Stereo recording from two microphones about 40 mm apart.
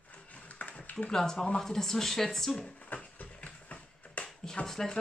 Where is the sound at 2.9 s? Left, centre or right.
Left.